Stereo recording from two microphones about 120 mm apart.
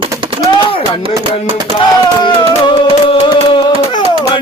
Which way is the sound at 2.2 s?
40° left (ahead or behind).